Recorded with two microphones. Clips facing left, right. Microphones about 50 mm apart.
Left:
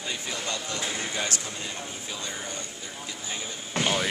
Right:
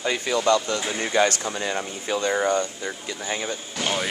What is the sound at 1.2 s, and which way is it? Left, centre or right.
Speech, right.